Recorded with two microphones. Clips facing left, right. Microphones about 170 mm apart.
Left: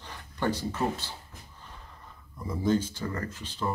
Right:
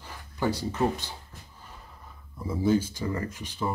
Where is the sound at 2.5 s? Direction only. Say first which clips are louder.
Right 2 dB; 10° right (ahead or behind).